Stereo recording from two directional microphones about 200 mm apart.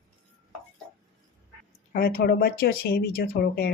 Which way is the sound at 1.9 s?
45° left (ahead or behind).